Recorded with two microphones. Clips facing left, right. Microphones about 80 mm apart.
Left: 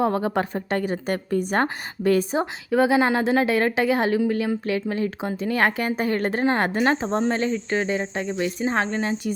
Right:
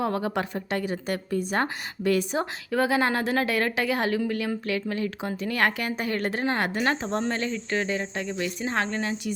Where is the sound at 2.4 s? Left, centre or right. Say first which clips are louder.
Left 5 dB; centre.